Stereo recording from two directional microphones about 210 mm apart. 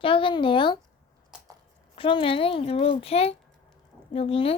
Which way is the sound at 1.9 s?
25° left (ahead or behind).